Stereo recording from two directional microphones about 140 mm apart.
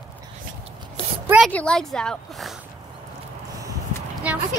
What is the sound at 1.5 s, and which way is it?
A woman's voice, 5° left (ahead or behind).